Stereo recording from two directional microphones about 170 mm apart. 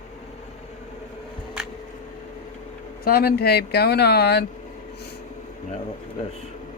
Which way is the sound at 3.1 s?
65° left (ahead or behind).